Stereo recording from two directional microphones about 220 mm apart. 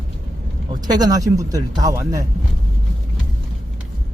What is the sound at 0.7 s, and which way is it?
Speech, 20° right (ahead or behind).